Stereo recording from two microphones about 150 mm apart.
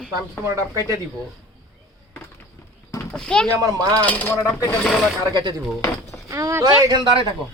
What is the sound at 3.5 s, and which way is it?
Speech, 25° right (ahead or behind).